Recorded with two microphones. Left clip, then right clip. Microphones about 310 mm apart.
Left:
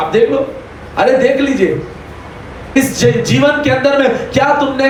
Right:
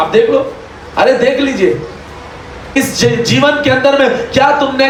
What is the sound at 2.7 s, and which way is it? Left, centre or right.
Speech, right.